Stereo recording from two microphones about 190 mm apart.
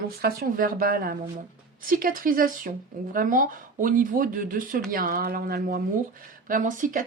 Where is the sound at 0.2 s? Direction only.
50° right (ahead or behind).